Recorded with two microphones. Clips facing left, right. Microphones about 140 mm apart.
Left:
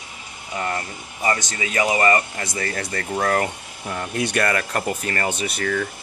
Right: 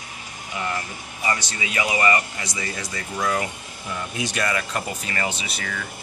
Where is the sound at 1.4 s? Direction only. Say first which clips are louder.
Left 4 dB; 45° left (ahead or behind).